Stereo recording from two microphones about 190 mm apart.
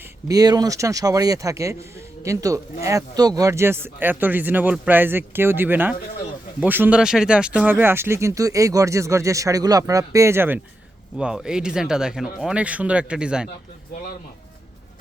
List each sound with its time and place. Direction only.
0.3 s speech: 20° right (ahead or behind)